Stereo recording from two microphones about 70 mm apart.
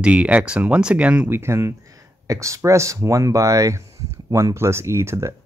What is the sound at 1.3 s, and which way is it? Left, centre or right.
Speech, right.